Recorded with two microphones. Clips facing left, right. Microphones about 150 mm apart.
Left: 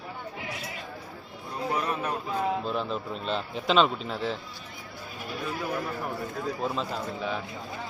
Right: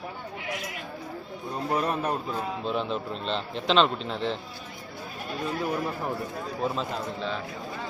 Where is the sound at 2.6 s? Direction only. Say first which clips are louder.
Right 2 dB; 5° left (ahead or behind).